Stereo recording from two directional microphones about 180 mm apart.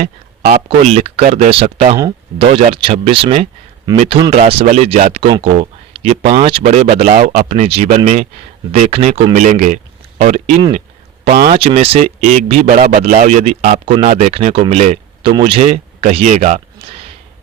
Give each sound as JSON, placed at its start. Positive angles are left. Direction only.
{"t": 0.4, "sound": "speech", "side_deg": -55}
{"t": 0.9, "sound": "speech", "side_deg": -40}
{"t": 11.5, "sound": "speech", "side_deg": -35}